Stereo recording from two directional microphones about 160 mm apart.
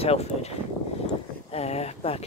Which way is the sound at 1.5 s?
40° left (ahead or behind).